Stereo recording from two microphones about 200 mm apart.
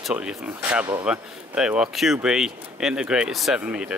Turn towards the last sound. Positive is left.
turn(degrees=-5)  # may be behind; listen again after turning